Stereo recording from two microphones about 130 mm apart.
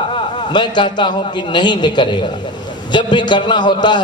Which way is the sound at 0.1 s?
35° left (ahead or behind).